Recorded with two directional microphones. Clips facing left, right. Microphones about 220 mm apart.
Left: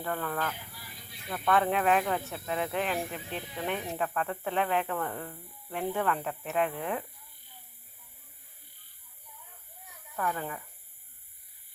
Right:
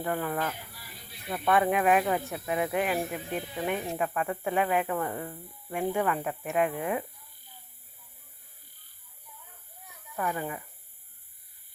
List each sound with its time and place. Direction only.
0.0 s speech: 15° right (ahead or behind)
10.2 s speech: 10° right (ahead or behind)